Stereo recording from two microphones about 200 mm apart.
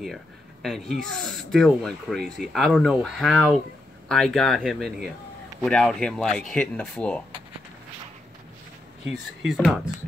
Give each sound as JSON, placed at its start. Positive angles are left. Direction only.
{"t": 0.0, "sound": "speech", "side_deg": 0}
{"t": 9.5, "sound": "speech", "side_deg": 0}